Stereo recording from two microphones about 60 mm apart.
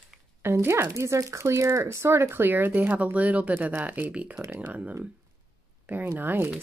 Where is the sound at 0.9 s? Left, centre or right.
Right.